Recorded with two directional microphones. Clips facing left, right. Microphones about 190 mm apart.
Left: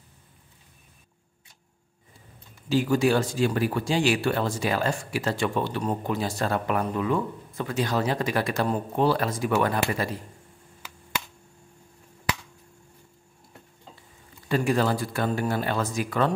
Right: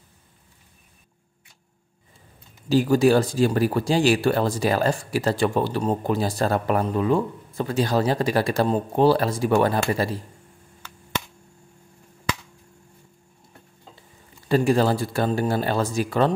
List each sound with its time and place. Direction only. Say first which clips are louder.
2.7 s speech: right 4 dB; 35° right (ahead or behind)
14.5 s speech: right 4 dB; 30° right (ahead or behind)